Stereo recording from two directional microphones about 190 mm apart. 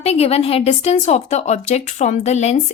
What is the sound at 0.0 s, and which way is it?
A woman's voice, 35° left (ahead or behind).